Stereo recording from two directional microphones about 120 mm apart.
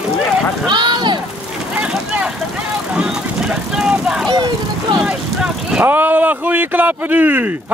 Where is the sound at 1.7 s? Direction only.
10° right (ahead or behind).